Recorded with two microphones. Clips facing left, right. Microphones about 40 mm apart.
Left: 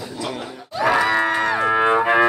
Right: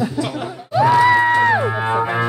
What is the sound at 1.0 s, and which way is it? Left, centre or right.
Music, centre.